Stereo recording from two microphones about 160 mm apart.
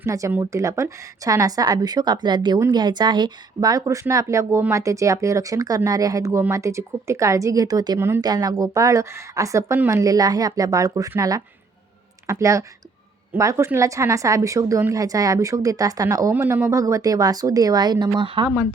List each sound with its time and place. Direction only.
0.0 s speech: 20° right (ahead or behind)